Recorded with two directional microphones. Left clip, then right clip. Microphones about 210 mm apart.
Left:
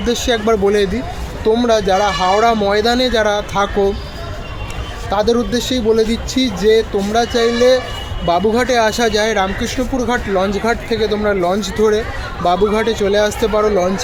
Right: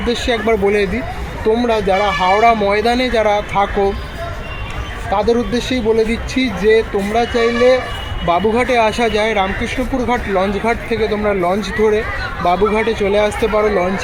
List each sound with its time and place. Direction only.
0.0 s speech: 15° left (ahead or behind)
5.1 s speech: 15° left (ahead or behind)